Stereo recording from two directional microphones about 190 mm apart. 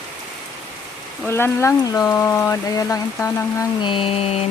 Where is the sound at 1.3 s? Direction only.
15° left (ahead or behind).